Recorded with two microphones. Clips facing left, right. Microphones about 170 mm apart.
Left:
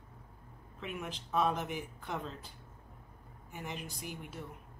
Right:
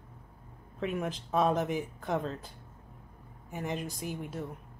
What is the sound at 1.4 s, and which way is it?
Speech, 40° right (ahead or behind).